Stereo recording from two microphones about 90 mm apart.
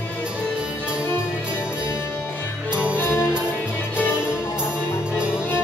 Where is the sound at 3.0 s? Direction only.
30° left (ahead or behind).